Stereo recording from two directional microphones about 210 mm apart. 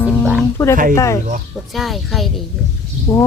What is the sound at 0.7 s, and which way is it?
Speech, 40° right (ahead or behind).